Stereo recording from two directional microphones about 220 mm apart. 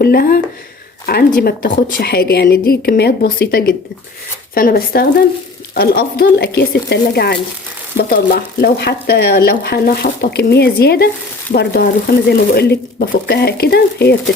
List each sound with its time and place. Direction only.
0.0 s speech: 45° left (ahead or behind)